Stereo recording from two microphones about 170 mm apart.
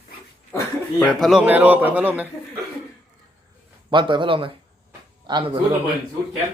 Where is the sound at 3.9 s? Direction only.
30° right (ahead or behind).